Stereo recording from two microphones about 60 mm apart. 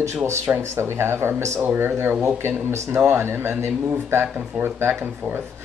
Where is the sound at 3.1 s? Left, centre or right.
Right.